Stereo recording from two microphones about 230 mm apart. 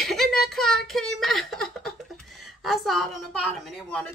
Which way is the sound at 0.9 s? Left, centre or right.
Centre.